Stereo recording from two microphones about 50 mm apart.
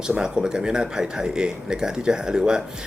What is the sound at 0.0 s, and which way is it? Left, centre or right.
Speech, centre.